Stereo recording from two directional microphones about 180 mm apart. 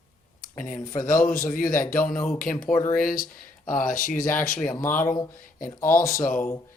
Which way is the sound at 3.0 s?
50° left (ahead or behind).